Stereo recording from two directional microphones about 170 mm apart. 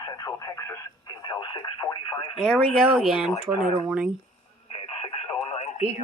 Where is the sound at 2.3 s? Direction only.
Centre (ahead or behind).